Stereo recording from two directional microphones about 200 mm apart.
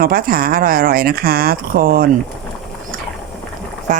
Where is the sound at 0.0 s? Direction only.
45° right (ahead or behind).